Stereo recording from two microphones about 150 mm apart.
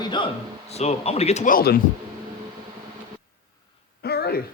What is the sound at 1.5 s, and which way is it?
Speech, 75° left (ahead or behind).